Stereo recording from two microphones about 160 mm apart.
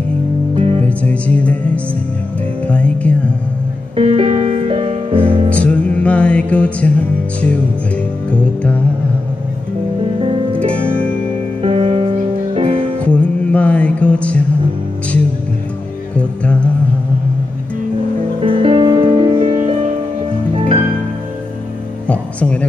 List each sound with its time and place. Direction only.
0.6 s music: 40° right (ahead or behind)
0.8 s music: 10° left (ahead or behind)
2.6 s music: 10° left (ahead or behind)
3.9 s music: 35° right (ahead or behind)
5.5 s music: 10° left (ahead or behind)
8.3 s music: 10° left (ahead or behind)
10.6 s music: 10° left (ahead or behind)
11.6 s music: 40° right (ahead or behind)
13.0 s music: 10° left (ahead or behind)
16.2 s music: 10° left (ahead or behind)
18.4 s music: 35° right (ahead or behind)
20.5 s music: 35° right (ahead or behind)
22.0 s music: 10° left (ahead or behind)